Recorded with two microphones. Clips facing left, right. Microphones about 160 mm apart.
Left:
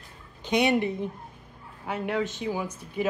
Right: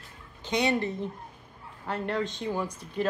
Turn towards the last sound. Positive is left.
turn(degrees=5)  # may be behind; listen again after turning